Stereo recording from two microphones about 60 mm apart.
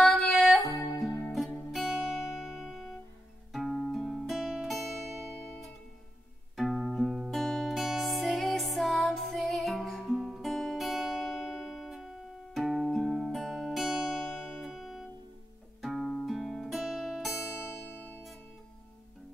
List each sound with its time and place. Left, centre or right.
0.0 s music: centre
1.9 s music: centre
6.5 s music: centre
13.8 s music: centre
17.6 s music: left